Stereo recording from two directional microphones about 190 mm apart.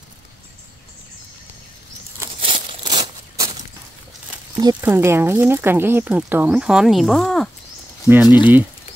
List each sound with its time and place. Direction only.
2.4 s a sound: 25° right (ahead or behind)
4.6 s speech: 15° right (ahead or behind); by 7.4 s centre (ahead or behind)
8.3 s speech: 25° left (ahead or behind)